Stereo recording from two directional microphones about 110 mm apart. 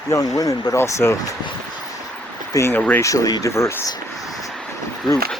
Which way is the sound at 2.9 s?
30° left (ahead or behind).